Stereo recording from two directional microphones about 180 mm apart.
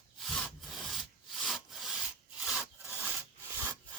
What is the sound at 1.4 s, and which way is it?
Sawing, centre (ahead or behind).